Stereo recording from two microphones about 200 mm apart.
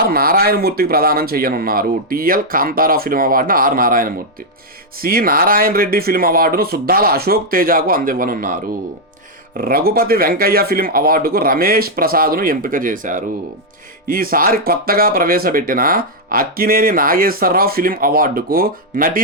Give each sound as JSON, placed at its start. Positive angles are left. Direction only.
{"t": 0.0, "sound": "speech", "side_deg": -50}
{"t": 9.6, "sound": "speech", "side_deg": -50}